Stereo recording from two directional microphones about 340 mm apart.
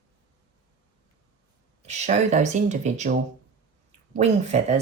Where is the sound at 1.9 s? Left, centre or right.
Centre.